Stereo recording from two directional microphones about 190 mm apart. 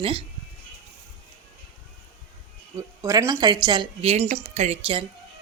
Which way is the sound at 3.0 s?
15° right (ahead or behind).